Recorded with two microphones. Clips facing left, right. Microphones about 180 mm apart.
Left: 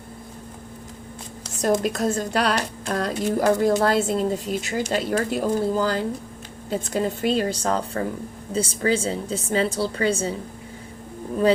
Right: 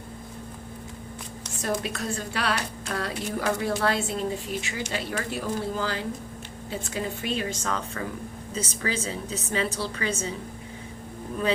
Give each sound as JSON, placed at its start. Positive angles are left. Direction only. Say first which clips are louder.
{"t": 1.6, "sound": "a woman's voice", "louder": "left 8 dB", "side_deg": 40}